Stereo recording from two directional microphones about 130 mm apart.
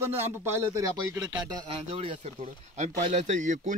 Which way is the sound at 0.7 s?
25° right (ahead or behind).